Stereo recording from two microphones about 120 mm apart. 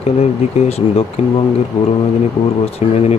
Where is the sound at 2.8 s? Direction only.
60° left (ahead or behind).